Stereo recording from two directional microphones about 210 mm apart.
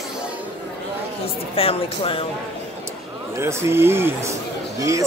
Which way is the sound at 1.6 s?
25° left (ahead or behind).